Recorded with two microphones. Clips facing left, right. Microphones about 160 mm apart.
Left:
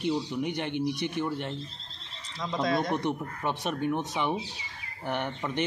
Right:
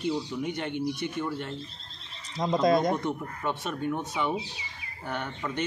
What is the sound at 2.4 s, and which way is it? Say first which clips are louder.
Speech: right 5 dB; 45° right (ahead or behind).